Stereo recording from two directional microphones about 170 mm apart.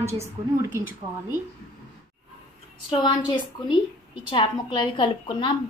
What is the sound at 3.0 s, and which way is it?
A woman's voice, 25° left (ahead or behind).